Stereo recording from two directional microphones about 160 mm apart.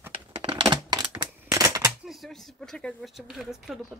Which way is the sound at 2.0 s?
Centre (ahead or behind).